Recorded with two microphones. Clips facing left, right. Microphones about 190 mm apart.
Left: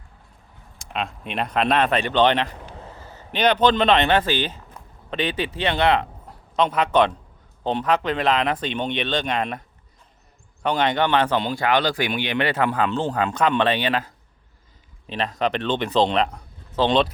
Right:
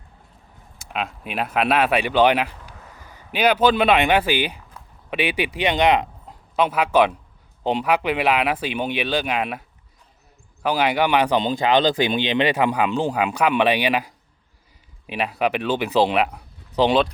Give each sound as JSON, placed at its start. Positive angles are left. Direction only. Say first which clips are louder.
{"t": 0.8, "sound": "speech", "louder": "even", "side_deg": -5}
{"t": 2.7, "sound": "a sound", "louder": "left 5 dB", "side_deg": 30}
{"t": 3.0, "sound": "a man's voice", "louder": "right 1 dB", "side_deg": -15}